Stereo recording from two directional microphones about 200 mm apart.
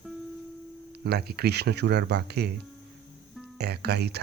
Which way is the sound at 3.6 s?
55° right (ahead or behind).